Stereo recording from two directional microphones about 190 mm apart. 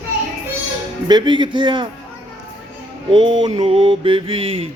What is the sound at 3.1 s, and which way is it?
Mantra, 25° right (ahead or behind).